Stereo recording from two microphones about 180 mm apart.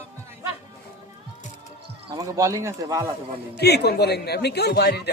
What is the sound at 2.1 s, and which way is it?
Speech, 20° right (ahead or behind).